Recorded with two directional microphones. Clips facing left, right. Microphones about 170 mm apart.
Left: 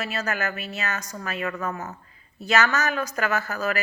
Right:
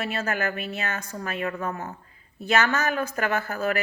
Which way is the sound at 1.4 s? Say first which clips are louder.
Left 1 dB; 30° right (ahead or behind).